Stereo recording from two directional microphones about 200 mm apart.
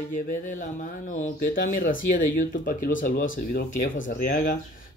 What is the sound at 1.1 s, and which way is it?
Speech, 40° left (ahead or behind).